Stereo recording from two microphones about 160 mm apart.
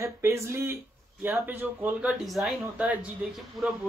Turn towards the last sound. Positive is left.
turn(degrees=0)  # may be behind; listen again after turning